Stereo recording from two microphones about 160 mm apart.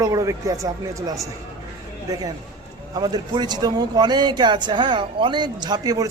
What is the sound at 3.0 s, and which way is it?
Speech, 25° right (ahead or behind).